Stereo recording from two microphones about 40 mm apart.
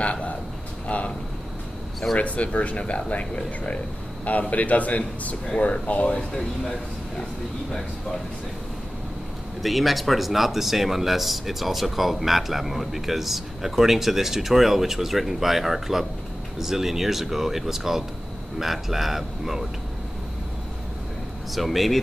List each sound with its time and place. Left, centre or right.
0.0 s speech: left
2.1 s speech: left
2.8 s speech: left
6.1 s speech: centre
9.6 s speech: centre
21.5 s speech: centre